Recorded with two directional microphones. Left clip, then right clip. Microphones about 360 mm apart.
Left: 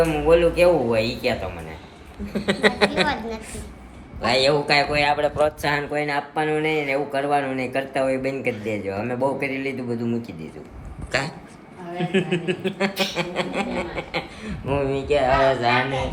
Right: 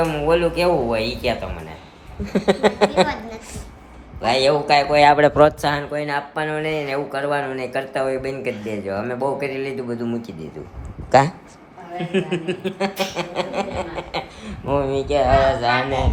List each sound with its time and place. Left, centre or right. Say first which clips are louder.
0.0 s speech: left 1 dB; centre
2.5 s a woman's voice: right 2 dB; centre
5.1 s speech: right 7 dB; right
5.6 s speech: right 1 dB; centre